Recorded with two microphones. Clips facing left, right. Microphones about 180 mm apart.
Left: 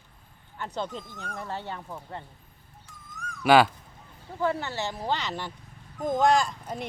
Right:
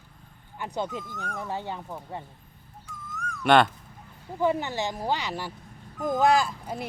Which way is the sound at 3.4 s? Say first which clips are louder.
Left 1 dB; 5° left (ahead or behind).